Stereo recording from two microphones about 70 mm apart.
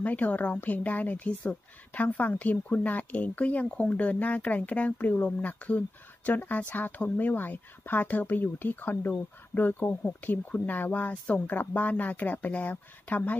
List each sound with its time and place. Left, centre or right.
0.0 s speech: left